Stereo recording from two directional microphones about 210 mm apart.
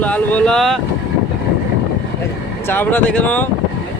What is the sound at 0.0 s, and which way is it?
Speech, 5° left (ahead or behind).